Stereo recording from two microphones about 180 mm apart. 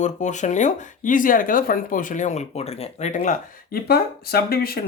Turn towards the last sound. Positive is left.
turn(degrees=60)  # may be behind; listen again after turning